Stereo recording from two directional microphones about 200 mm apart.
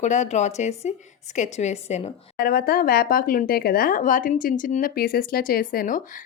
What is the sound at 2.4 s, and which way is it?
Speech, 50° left (ahead or behind).